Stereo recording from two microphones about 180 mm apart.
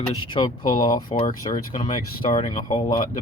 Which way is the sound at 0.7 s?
50° left (ahead or behind).